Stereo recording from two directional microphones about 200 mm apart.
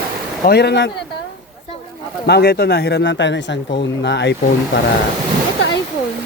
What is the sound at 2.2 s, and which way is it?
Speech, 55° left (ahead or behind).